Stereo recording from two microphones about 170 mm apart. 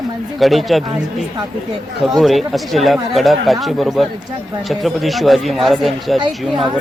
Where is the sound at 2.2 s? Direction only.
Centre (ahead or behind).